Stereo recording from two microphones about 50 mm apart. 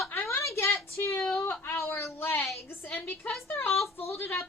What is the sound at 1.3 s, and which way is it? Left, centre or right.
Whimper, left.